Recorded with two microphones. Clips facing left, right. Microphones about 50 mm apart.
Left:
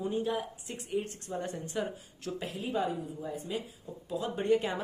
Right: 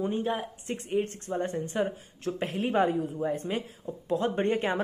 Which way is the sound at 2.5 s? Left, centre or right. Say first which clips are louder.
Right 7 dB; right.